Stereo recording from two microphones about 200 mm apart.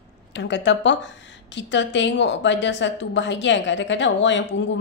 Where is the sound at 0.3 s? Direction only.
60° left (ahead or behind).